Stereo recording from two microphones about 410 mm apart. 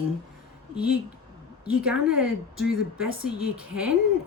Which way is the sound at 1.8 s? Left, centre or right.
Centre.